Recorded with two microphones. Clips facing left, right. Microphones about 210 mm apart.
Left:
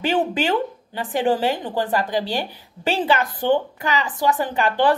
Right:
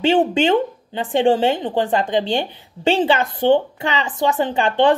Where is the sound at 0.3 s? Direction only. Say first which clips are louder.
Right 5 dB; 25° right (ahead or behind).